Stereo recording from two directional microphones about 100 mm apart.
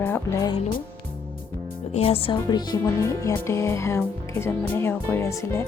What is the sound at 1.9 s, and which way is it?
Speech, 70° left (ahead or behind).